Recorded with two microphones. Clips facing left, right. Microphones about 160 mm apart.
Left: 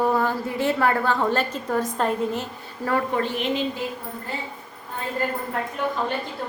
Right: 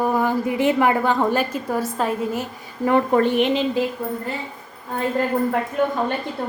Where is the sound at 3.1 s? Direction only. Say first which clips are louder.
Right 8 dB; 55° right (ahead or behind).